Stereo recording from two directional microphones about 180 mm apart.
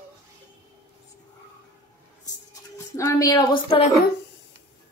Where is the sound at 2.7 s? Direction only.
15° left (ahead or behind).